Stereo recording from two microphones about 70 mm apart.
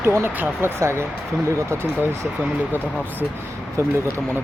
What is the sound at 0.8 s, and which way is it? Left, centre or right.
Speech, right.